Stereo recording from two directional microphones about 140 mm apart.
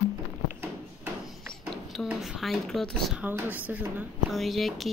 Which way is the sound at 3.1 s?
10° right (ahead or behind).